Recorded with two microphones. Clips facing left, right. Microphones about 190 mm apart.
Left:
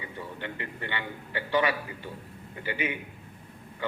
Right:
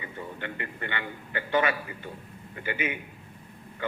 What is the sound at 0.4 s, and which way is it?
A man's voice, 55° right (ahead or behind).